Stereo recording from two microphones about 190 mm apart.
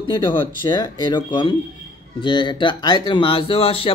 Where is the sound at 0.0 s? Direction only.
25° left (ahead or behind).